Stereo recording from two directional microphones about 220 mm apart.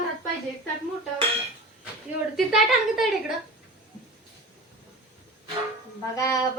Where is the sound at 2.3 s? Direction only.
Centre (ahead or behind).